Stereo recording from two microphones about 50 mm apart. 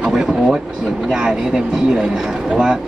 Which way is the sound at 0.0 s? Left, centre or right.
Centre.